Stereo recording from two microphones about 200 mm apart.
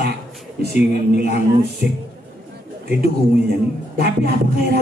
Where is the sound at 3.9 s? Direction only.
50° right (ahead or behind).